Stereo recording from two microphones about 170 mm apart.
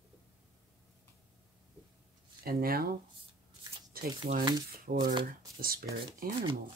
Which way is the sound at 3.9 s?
60° right (ahead or behind).